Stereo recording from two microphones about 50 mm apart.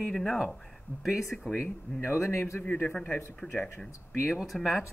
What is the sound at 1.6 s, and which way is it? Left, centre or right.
Speech, left.